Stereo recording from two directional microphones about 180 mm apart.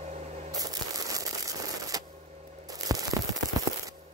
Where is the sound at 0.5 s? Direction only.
20° right (ahead or behind).